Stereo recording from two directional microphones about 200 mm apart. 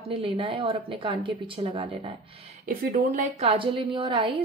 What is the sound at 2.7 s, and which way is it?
Speech, 45° right (ahead or behind).